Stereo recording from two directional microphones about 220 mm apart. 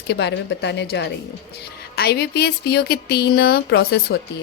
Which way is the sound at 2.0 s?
45° left (ahead or behind).